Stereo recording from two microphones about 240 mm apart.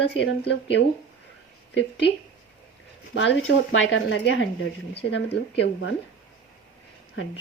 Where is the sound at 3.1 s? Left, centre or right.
Left.